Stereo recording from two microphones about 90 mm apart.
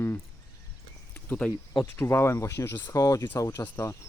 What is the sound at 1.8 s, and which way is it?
Speech, 25° left (ahead or behind).